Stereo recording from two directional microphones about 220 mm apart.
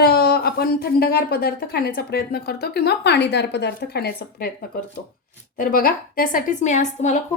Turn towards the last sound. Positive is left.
turn(degrees=35)  # may be behind; listen again after turning